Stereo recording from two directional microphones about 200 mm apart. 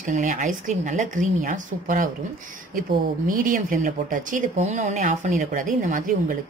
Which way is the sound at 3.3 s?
45° right (ahead or behind).